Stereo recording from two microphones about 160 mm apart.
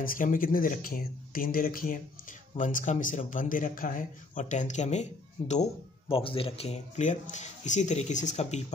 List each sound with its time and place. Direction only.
0.0 s speech: 60° left (ahead or behind)
2.5 s speech: 50° left (ahead or behind)